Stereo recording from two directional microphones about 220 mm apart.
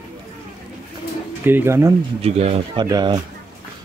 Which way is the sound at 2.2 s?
30° right (ahead or behind).